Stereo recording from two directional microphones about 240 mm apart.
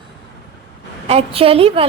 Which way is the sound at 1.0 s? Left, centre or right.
Right.